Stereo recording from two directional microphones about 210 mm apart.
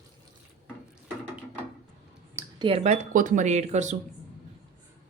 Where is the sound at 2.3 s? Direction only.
15° right (ahead or behind).